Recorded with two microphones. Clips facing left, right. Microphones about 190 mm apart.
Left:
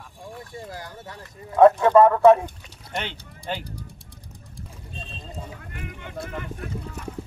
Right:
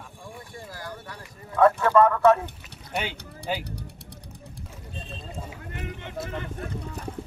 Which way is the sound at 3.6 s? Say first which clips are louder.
Right 1 dB; 65° right (ahead or behind).